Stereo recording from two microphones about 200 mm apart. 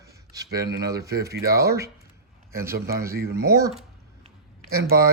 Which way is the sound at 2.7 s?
50° right (ahead or behind).